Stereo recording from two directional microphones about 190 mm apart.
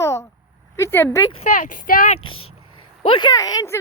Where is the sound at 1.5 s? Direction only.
45° left (ahead or behind).